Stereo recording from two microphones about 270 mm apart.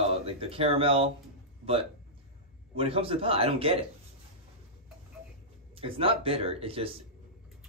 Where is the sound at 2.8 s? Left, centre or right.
Right.